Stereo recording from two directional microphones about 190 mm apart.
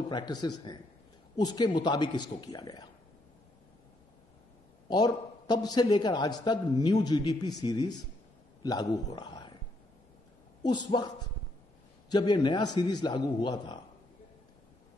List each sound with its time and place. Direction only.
0.1 s a man's voice: 20° left (ahead or behind)
4.8 s a man's voice: 20° left (ahead or behind)
9.1 s whispering: 20° left (ahead or behind)
10.6 s a man's voice: 25° left (ahead or behind)